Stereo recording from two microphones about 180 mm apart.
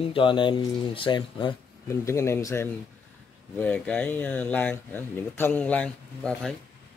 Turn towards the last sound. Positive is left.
turn(degrees=5)  # may be behind; listen again after turning